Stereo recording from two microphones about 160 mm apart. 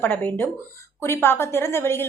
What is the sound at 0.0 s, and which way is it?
A woman's voice, 10° left (ahead or behind).